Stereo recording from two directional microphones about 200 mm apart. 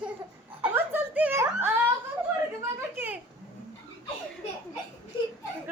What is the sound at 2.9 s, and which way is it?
Speech, 10° right (ahead or behind).